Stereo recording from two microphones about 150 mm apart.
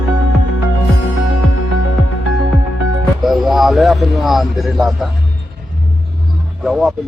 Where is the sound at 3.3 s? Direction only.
Centre (ahead or behind).